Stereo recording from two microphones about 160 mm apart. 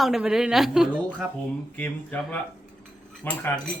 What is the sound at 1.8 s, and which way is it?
Cutlery, 10° left (ahead or behind).